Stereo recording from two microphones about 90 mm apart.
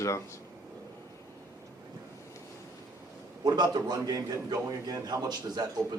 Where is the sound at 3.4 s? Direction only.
50° right (ahead or behind).